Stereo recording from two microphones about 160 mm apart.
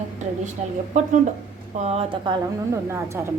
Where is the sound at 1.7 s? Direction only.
40° right (ahead or behind).